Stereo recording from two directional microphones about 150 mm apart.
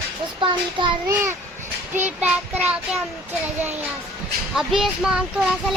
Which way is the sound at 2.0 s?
10° right (ahead or behind).